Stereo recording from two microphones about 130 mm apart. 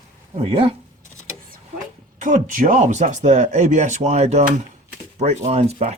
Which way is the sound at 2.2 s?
80° right.